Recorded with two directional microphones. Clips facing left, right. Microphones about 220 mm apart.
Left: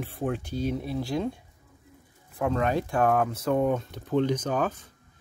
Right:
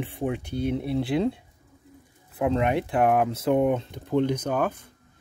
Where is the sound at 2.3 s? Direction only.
20° right (ahead or behind).